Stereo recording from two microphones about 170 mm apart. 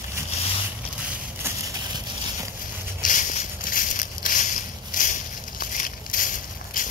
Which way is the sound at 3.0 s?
50° left (ahead or behind).